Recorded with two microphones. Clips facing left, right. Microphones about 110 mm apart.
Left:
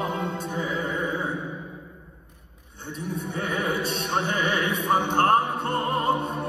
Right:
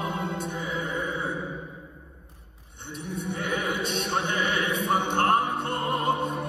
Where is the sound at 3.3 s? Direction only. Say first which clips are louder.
Left 2 dB; 30° left (ahead or behind).